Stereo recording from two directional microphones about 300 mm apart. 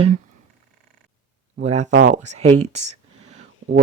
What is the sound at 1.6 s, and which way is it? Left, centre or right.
Speech, right.